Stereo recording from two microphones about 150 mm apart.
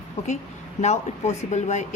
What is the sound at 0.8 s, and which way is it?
A woman's voice, 50° left (ahead or behind).